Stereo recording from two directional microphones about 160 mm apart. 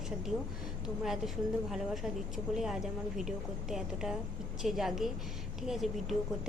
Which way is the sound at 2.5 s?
Centre (ahead or behind).